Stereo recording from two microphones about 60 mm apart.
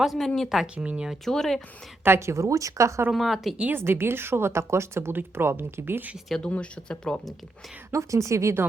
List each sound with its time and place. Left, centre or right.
0.0 s speech: centre
0.9 s speech: centre
1.1 s speech: centre
2.0 s speech: right
3.1 s speech: centre
3.8 s speech: right
6.4 s speech: centre
7.9 s speech: right